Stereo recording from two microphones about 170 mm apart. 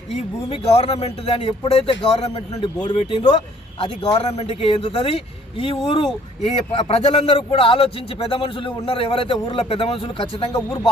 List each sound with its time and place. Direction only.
0.1 s a man's voice: 35° left (ahead or behind)
2.6 s a man's voice: 25° left (ahead or behind)